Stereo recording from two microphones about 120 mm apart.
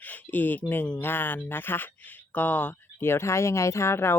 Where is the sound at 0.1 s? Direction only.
15° left (ahead or behind).